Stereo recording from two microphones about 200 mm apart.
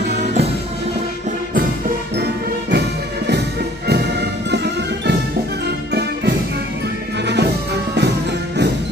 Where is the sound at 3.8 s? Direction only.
55° right (ahead or behind).